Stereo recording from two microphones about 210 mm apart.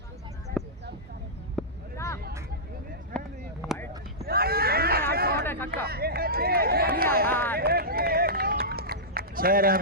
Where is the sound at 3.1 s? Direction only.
5° left (ahead or behind).